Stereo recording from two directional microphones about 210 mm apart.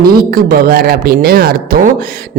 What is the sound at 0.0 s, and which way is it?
A man's voice, 45° right (ahead or behind).